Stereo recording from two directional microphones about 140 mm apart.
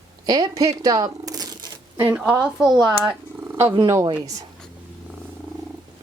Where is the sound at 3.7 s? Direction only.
30° right (ahead or behind).